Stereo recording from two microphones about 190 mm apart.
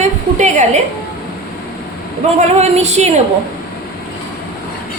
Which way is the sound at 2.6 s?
35° right (ahead or behind).